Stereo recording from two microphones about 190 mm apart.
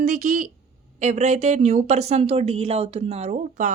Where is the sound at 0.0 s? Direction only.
45° right (ahead or behind).